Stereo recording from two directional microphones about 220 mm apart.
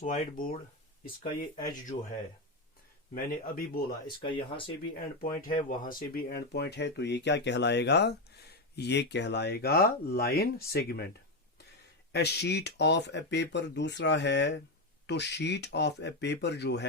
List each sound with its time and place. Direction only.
0.0 s speech: 40° left (ahead or behind)
1.2 s speech: 20° left (ahead or behind)
3.2 s speech: 40° left (ahead or behind)
4.0 s speech: 20° left (ahead or behind)
5.6 s speech: 40° left (ahead or behind)
12.1 s speech: 50° left (ahead or behind)